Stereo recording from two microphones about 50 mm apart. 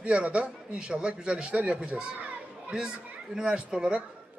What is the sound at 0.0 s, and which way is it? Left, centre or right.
A man's voice, right.